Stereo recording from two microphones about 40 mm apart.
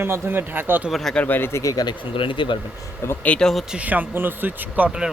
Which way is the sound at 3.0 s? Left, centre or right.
Left.